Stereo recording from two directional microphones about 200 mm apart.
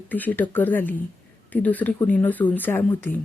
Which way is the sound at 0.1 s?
10° left (ahead or behind).